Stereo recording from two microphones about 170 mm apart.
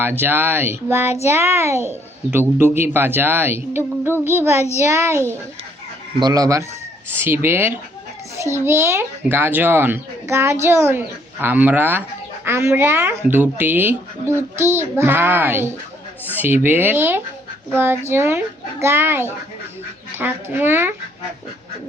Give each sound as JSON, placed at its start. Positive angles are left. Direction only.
{"t": 0.0, "sound": "a child's voice", "side_deg": -10}
{"t": 1.0, "sound": "child singing", "side_deg": 40}
{"t": 1.4, "sound": "a child's voice", "side_deg": -15}